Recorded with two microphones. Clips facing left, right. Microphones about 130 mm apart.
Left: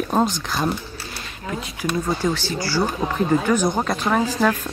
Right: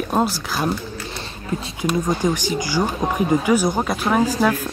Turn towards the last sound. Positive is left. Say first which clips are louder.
# right 2 dB
turn(degrees=-10)  # may be behind; listen again after turning